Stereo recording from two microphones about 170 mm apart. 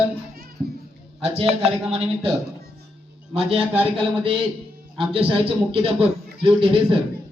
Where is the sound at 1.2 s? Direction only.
35° right (ahead or behind).